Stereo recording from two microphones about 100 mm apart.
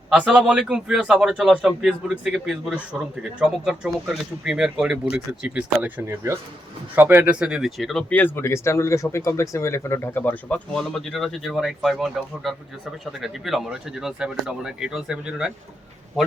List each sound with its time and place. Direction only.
0.1 s a man's voice: 5° right (ahead or behind)
6.1 s speech: 30° right (ahead or behind); by 8.0 s centre (ahead or behind)
8.1 s a man's voice: 20° left (ahead or behind); by 15.5 s 5° right (ahead or behind)